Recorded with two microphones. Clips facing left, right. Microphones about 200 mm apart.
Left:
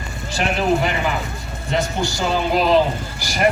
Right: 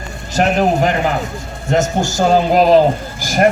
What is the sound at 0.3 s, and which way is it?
A man's voice, 45° right (ahead or behind).